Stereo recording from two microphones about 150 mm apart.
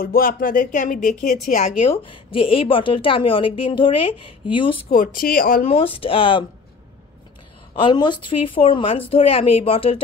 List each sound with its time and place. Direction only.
0.0 s speech: 75° left (ahead or behind); by 1.7 s 55° left (ahead or behind)
2.0 s a woman's voice: 35° left (ahead or behind)
4.8 s speech: 65° left (ahead or behind)
5.7 s a woman's voice: 40° left (ahead or behind)
7.7 s a woman's voice: 30° left (ahead or behind)